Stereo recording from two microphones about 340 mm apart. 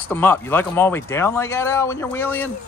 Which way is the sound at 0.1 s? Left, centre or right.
Centre.